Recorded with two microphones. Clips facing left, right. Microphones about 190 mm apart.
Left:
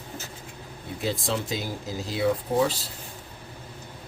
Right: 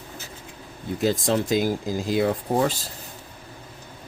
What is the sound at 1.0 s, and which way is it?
Speech, 45° right (ahead or behind).